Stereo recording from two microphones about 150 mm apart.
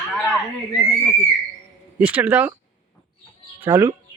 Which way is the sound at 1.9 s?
10° right (ahead or behind).